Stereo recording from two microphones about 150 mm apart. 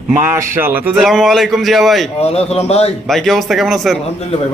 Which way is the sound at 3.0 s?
Centre (ahead or behind).